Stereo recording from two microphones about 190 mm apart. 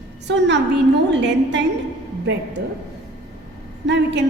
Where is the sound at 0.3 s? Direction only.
70° right (ahead or behind).